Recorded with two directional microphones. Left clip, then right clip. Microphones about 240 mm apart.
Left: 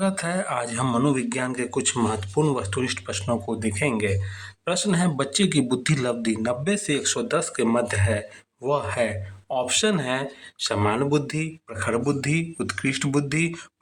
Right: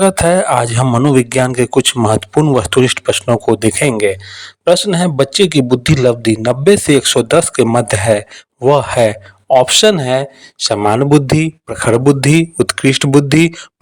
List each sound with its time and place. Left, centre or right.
0.0 s speech: right